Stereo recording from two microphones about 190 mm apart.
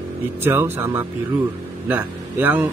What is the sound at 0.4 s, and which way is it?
A man's voice, 10° right (ahead or behind).